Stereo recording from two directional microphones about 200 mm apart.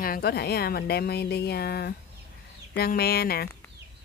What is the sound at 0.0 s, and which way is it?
Speech, 50° left (ahead or behind).